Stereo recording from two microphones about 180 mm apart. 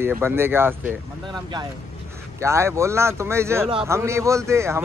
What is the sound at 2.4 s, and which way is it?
Speech, 15° right (ahead or behind).